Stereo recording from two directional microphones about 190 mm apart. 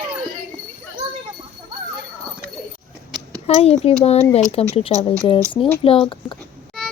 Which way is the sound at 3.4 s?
35° left (ahead or behind).